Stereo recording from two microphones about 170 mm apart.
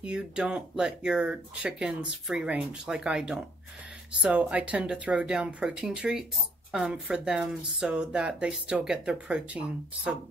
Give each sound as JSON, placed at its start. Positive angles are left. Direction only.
{"t": 0.0, "sound": "speech", "side_deg": -5}